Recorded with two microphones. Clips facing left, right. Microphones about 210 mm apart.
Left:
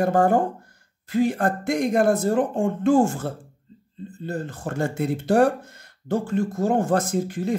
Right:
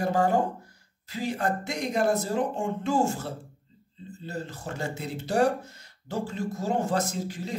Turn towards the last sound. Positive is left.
turn(degrees=55)  # may be behind; listen again after turning